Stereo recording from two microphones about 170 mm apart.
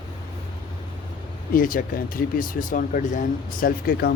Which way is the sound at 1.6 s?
55° left (ahead or behind).